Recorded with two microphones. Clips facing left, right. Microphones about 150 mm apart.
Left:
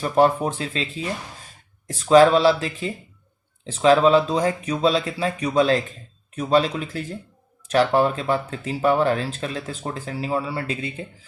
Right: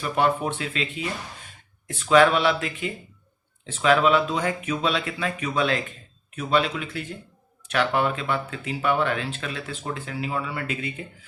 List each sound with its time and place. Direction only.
0.0 s speech: 35° left (ahead or behind)